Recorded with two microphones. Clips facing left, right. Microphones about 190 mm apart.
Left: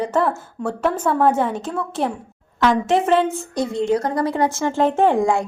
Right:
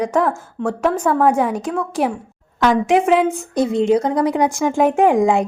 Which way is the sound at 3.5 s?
20° right (ahead or behind).